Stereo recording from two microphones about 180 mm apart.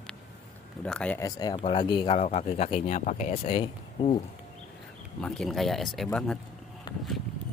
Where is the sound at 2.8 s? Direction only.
45° left (ahead or behind).